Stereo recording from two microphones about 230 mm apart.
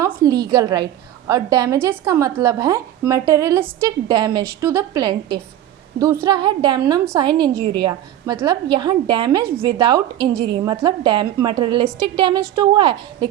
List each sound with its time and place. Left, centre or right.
0.3 s a woman's voice: centre